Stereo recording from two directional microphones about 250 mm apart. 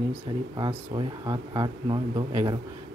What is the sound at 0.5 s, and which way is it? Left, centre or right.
Speech, centre.